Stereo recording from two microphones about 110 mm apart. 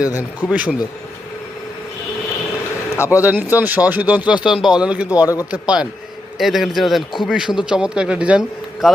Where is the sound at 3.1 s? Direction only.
15° right (ahead or behind).